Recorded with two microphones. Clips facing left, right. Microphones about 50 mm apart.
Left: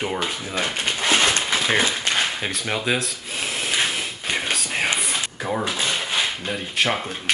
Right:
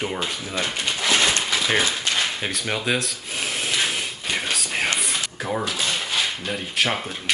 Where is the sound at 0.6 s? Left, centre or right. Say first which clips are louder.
Left 1 dB; centre.